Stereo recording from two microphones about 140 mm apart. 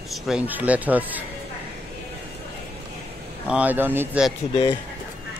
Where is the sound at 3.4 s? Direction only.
10° right (ahead or behind).